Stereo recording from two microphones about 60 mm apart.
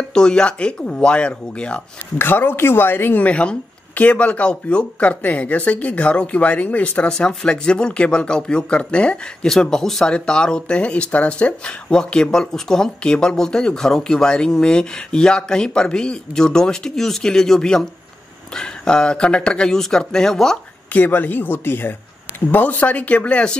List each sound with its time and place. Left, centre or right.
0.1 s speech: centre
2.1 s speech: left
3.3 s speech: left
20.9 s speech: left